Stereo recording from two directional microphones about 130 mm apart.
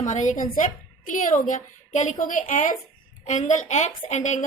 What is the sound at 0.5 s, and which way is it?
A woman's voice, 80° left.